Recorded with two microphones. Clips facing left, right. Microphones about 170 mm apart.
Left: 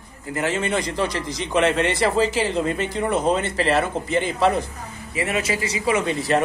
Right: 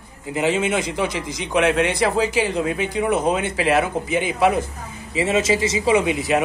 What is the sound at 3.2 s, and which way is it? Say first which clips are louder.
Speech: even; 15° right (ahead or behind).